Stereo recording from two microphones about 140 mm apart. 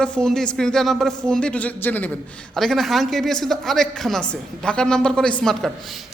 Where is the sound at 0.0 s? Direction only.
5° left (ahead or behind).